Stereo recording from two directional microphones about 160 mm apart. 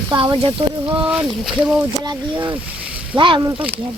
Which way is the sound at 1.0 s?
5° right (ahead or behind).